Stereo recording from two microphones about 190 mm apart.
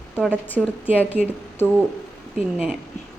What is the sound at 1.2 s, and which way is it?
Speech, 45° right (ahead or behind).